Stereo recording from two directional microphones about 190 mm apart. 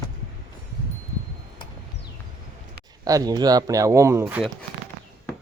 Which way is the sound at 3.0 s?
20° right (ahead or behind).